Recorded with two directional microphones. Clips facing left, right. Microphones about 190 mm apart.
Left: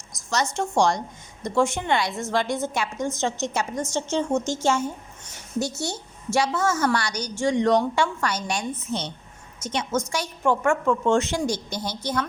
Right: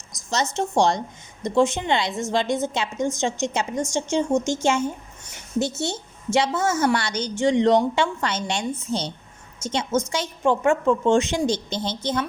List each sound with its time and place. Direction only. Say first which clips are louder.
0.5 s a woman's voice: right 2 dB; 20° right (ahead or behind)